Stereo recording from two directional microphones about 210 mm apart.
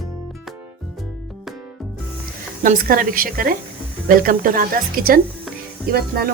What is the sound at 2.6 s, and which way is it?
Speech, 40° right (ahead or behind).